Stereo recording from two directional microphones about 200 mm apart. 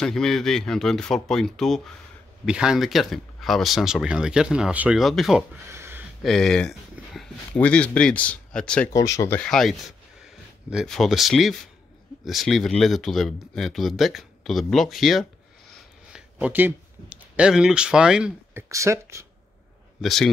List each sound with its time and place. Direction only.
0.0 s speech: centre (ahead or behind)
5.7 s a sound: 10° right (ahead or behind)
6.2 s speech: centre (ahead or behind)
8.9 s speech: 15° left (ahead or behind)
9.4 s speech: centre (ahead or behind); by 19.2 s 15° right (ahead or behind)
20.0 s speech: centre (ahead or behind)